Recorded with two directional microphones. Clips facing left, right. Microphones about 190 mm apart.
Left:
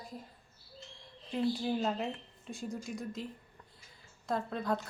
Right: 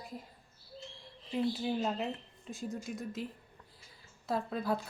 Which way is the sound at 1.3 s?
Centre (ahead or behind).